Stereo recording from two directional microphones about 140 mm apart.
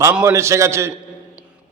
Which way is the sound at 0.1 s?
10° right (ahead or behind).